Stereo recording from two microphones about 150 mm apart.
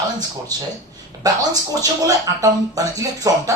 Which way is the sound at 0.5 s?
25° right (ahead or behind).